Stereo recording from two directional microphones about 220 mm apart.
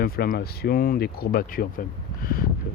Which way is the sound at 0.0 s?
45° left (ahead or behind).